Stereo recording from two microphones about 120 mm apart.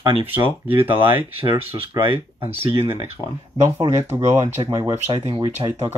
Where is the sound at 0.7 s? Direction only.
15° right (ahead or behind).